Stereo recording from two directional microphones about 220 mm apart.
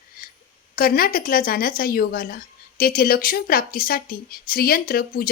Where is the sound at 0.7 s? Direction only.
40° left (ahead or behind).